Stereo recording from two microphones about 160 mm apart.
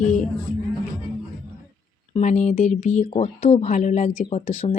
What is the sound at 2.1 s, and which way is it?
Speech, 50° left (ahead or behind).